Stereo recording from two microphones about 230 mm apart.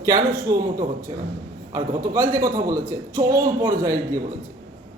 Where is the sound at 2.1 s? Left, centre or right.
Centre.